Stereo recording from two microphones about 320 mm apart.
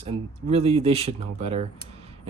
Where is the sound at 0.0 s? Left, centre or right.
Centre.